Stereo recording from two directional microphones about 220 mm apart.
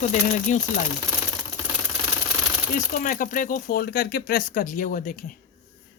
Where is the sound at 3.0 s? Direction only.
35° left (ahead or behind).